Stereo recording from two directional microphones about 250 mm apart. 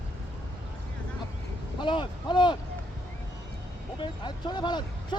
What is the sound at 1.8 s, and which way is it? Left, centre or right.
Speech, centre.